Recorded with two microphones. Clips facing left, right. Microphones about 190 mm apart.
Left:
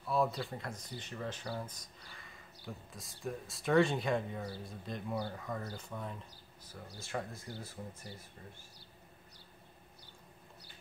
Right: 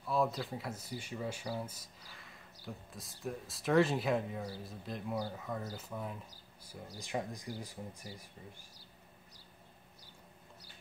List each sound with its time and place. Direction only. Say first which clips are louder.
0.0 s speech: even; centre (ahead or behind)
7.0 s speech: right 2 dB; 15° right (ahead or behind)